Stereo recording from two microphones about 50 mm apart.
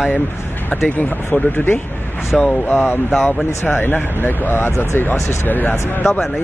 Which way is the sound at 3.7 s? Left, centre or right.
Left.